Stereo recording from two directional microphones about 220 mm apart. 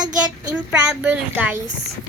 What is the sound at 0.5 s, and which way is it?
Speech, 5° right (ahead or behind).